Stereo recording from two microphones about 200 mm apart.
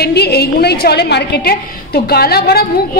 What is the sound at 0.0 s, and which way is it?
A woman's voice, 55° left (ahead or behind).